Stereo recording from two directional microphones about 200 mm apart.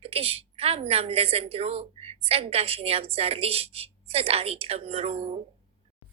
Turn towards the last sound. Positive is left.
turn(degrees=-30)  # may be behind; listen again after turning